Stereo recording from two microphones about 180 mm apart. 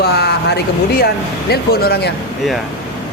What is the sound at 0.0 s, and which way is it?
A man's voice, 60° left (ahead or behind).